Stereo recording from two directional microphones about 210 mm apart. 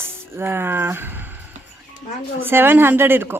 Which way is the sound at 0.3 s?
10° right (ahead or behind).